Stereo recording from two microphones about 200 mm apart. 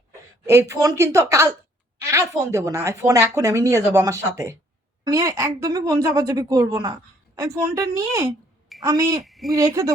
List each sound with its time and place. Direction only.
0.4 s a woman's voice: 15° right (ahead or behind)
9.2 s speech: centre (ahead or behind)
9.5 s a woman's voice: 15° right (ahead or behind)